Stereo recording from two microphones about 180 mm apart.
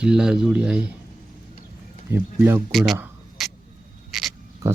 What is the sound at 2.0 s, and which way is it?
Speech, 15° right (ahead or behind).